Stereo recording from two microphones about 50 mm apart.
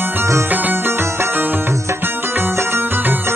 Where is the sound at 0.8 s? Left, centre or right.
Right.